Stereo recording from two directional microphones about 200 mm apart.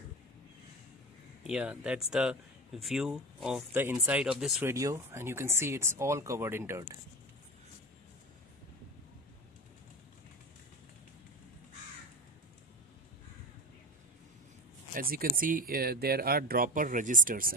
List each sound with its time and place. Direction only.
1.4 s speech: 5° right (ahead or behind)
4.7 s speech: 15° right (ahead or behind)
15.0 s speech: 45° right (ahead or behind)